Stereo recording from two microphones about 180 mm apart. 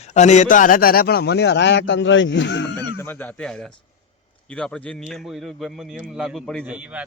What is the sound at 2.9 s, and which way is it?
A man's voice, 10° left (ahead or behind).